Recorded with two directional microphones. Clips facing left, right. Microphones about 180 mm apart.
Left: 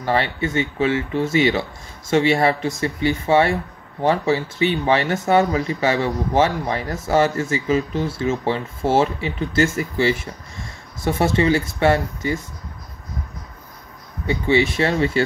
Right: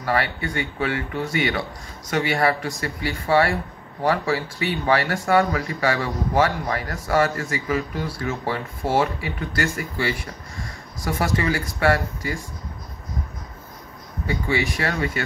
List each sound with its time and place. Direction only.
0.0 s speech: 25° left (ahead or behind)
14.2 s speech: 25° left (ahead or behind)